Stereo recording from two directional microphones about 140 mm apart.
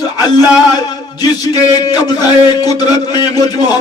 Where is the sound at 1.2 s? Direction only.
30° left (ahead or behind).